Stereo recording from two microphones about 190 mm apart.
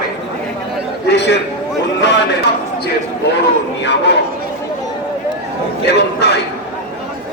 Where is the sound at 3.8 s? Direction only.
65° left (ahead or behind).